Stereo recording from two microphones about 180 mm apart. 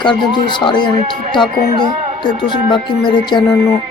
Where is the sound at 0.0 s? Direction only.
25° left (ahead or behind).